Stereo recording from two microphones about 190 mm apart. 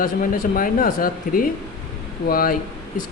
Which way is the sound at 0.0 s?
45° left (ahead or behind).